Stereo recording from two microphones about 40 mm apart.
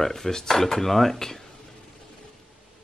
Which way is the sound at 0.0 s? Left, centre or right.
Centre.